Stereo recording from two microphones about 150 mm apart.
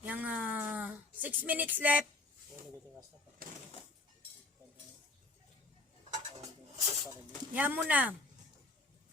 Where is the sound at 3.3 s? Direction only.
65° right (ahead or behind).